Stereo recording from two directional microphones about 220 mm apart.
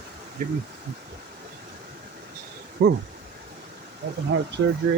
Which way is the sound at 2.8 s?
45° right (ahead or behind).